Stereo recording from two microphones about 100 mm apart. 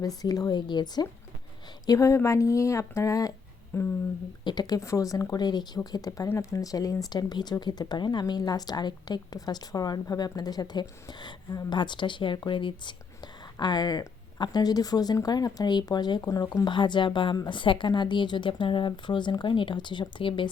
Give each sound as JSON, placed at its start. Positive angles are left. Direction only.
{"t": 0.0, "sound": "speech", "side_deg": 40}
{"t": 1.9, "sound": "speech", "side_deg": 30}
{"t": 3.7, "sound": "humming", "side_deg": 25}
{"t": 4.4, "sound": "speech", "side_deg": 45}
{"t": 4.8, "sound": "speech", "side_deg": 30}